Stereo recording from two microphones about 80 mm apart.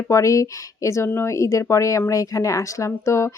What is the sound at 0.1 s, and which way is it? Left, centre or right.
Speech, left.